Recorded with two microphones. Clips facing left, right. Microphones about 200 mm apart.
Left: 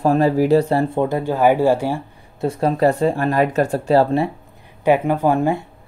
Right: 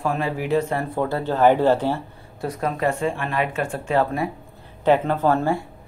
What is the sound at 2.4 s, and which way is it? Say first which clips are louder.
Speech: left 7 dB; 30° left (ahead or behind).